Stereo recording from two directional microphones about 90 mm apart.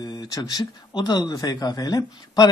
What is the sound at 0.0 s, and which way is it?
Speech, 50° left (ahead or behind).